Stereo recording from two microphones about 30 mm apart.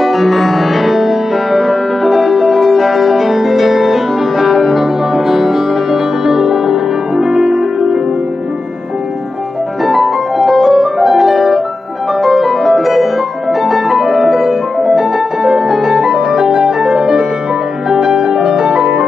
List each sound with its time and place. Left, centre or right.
0.0 s music: centre
9.8 s music: centre
15.7 s piano: centre
16.8 s music: centre